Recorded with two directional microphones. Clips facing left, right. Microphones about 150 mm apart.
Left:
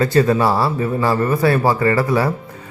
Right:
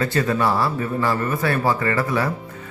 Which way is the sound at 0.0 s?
35° left (ahead or behind).